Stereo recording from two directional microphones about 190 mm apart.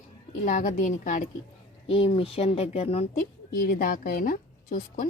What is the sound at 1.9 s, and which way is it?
Speech, 30° left (ahead or behind).